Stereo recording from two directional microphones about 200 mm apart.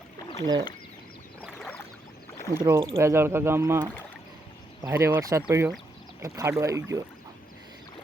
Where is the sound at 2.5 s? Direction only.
15° right (ahead or behind).